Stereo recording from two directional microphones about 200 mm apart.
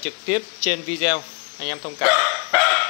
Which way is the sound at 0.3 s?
35° left (ahead or behind).